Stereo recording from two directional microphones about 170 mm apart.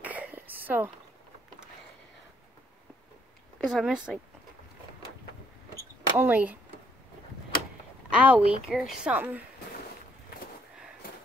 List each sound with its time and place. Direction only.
0.0 s a sound: 10° right (ahead or behind)
3.6 s speech: centre (ahead or behind)
6.1 s a woman's voice: 10° right (ahead or behind)
8.1 s a woman's voice: 10° right (ahead or behind)